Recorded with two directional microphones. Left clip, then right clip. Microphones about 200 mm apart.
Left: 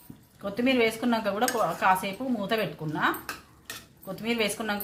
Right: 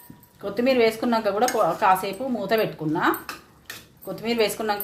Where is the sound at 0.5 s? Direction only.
25° right (ahead or behind).